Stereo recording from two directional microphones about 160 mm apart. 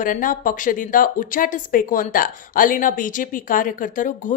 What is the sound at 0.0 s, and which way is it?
Speech, 55° left (ahead or behind).